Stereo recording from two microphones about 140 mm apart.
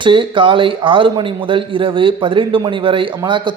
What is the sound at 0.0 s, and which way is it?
A man's voice, 35° right (ahead or behind).